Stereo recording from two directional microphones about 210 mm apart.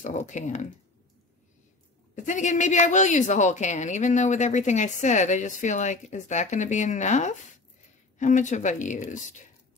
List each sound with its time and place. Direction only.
0.0 s a woman's voice: 35° left (ahead or behind)
2.1 s a woman's voice: 35° left (ahead or behind)